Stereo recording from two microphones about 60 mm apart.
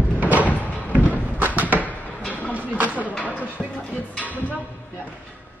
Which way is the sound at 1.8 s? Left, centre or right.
Left.